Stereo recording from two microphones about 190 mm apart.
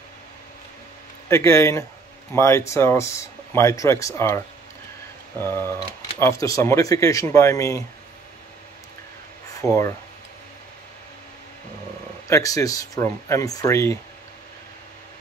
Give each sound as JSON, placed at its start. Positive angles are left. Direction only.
{"t": 1.3, "sound": "speech", "side_deg": 15}
{"t": 5.4, "sound": "speech", "side_deg": 10}
{"t": 9.6, "sound": "speech", "side_deg": 15}
{"t": 12.3, "sound": "speech", "side_deg": 15}